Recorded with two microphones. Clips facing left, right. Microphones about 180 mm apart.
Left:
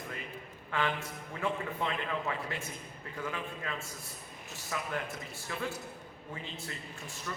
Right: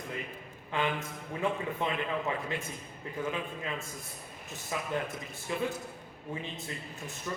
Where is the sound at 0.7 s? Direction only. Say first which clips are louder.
Right 1 dB; 20° right (ahead or behind).